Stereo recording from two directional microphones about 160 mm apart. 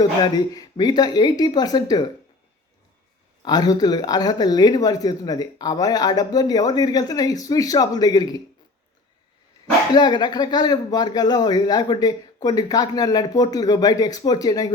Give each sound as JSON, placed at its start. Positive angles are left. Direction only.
{"t": 0.0, "sound": "speech", "side_deg": 25}
{"t": 3.4, "sound": "speech", "side_deg": 25}
{"t": 9.9, "sound": "speech", "side_deg": 25}